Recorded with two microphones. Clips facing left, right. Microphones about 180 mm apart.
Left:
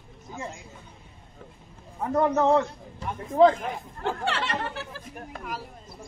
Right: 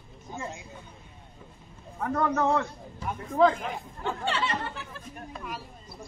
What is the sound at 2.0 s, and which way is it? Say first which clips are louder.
Speech: left 4 dB; 20° left (ahead or behind).